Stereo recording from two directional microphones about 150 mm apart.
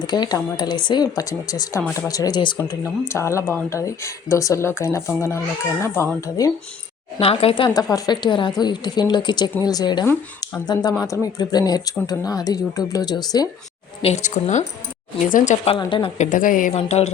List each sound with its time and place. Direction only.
0.1 s speech: 25° left (ahead or behind)
2.8 s speech: 15° left (ahead or behind)
7.2 s a woman's voice: 40° left (ahead or behind)
7.7 s a woman's voice: 25° left (ahead or behind)
14.0 s a woman's voice: 50° left (ahead or behind)
15.8 s a woman's voice: 35° left (ahead or behind)
16.1 s a woman's voice: 55° left (ahead or behind)
16.7 s speech: 45° left (ahead or behind)